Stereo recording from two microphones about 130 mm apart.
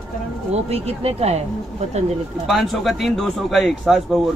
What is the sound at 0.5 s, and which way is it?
Speech, 50° right (ahead or behind).